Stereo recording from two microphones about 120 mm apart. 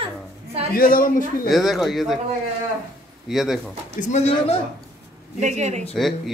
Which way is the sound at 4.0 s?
90° left.